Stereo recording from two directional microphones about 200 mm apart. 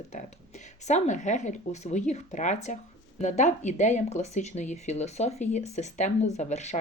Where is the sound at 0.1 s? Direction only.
35° left (ahead or behind).